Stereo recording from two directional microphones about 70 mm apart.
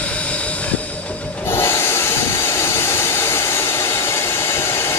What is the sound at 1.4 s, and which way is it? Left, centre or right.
Hiss, left.